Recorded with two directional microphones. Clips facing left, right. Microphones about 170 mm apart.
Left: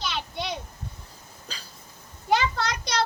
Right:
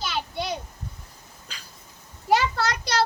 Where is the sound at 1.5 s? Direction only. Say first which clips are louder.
Left 3 dB; 35° left (ahead or behind).